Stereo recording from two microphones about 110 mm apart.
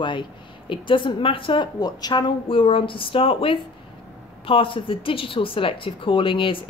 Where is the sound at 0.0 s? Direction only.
45° left (ahead or behind).